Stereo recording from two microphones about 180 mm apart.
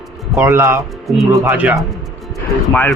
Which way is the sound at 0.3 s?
15° right (ahead or behind).